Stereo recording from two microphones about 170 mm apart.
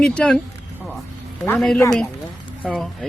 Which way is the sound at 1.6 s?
Centre (ahead or behind).